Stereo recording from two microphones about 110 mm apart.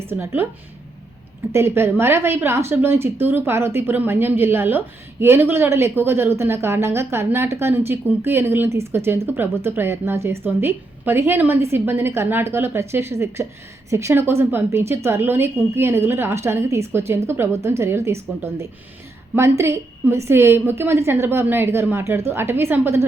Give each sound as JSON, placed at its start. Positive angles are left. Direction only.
{"t": 0.1, "sound": "a woman's voice", "side_deg": -20}
{"t": 1.5, "sound": "a woman's voice", "side_deg": -20}
{"t": 19.4, "sound": "a woman's voice", "side_deg": -25}